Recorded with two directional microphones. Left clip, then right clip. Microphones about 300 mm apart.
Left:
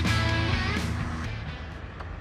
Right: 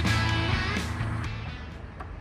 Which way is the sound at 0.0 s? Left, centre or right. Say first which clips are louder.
Even; centre.